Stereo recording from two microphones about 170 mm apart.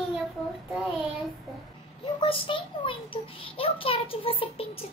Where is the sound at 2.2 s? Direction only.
30° left (ahead or behind).